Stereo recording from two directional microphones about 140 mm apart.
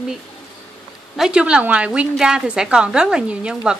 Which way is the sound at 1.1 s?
5° right (ahead or behind).